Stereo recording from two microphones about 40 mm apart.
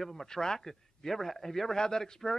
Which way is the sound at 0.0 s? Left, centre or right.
Centre.